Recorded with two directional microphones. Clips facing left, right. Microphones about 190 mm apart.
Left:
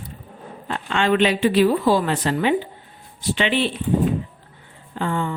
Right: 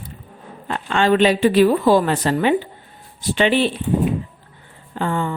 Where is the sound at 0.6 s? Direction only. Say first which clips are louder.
Right 3 dB; 40° right (ahead or behind).